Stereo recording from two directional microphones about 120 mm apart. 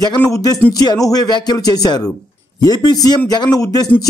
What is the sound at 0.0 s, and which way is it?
A man's voice, 30° left (ahead or behind).